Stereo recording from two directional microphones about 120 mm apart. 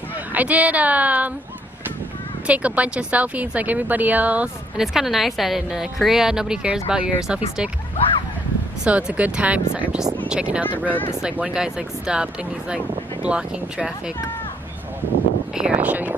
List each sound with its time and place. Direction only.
0.3 s speech: 15° right (ahead or behind)
2.4 s speech: 10° right (ahead or behind)
8.8 s speech: 10° right (ahead or behind)
10.9 s speech: 15° left (ahead or behind)
11.2 s speech: 10° right (ahead or behind)
15.5 s speech: 10° right (ahead or behind)